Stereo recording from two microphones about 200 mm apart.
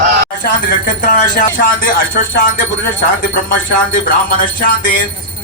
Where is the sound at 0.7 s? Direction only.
40° left (ahead or behind).